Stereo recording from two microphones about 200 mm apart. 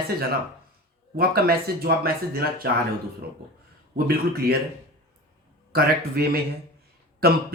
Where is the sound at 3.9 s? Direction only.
50° right (ahead or behind).